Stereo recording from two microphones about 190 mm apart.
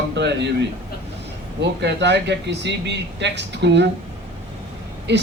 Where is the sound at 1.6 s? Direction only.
65° right (ahead or behind).